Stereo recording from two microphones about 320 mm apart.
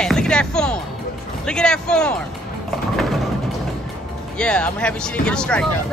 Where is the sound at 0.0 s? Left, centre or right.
Centre.